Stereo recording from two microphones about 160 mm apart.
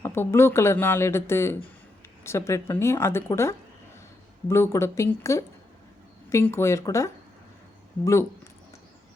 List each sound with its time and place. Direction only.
0.0 s speech: 15° left (ahead or behind)